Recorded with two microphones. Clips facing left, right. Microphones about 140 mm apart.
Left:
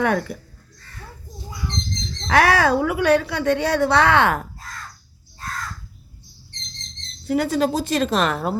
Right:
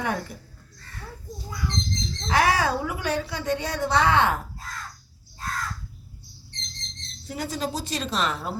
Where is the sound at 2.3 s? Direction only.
70° left (ahead or behind).